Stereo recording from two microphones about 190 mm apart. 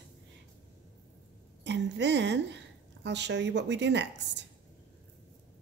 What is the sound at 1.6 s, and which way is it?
A woman's voice, 65° right (ahead or behind).